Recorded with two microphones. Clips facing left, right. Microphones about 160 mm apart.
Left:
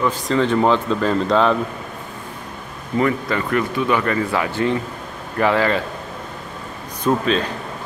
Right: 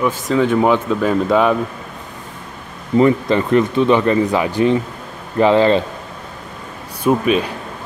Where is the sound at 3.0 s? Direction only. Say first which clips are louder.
Right 6 dB; 25° right (ahead or behind).